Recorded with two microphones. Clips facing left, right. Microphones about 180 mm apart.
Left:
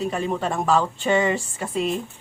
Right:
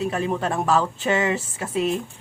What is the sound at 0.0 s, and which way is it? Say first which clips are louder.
Speech: right 1 dB; centre (ahead or behind).